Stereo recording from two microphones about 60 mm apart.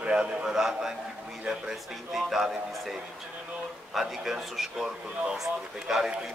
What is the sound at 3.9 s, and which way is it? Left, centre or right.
A man's voice, centre.